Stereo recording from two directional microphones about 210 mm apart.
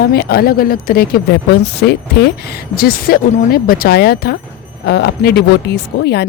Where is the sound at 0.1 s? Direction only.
45° left (ahead or behind).